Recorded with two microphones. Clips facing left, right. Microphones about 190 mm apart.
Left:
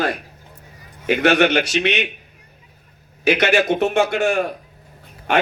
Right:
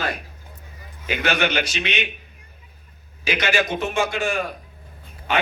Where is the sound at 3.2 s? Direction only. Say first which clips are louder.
Left 6 dB; 65° left (ahead or behind).